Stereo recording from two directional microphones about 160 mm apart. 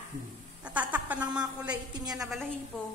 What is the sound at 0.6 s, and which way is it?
A woman's voice, 10° right (ahead or behind).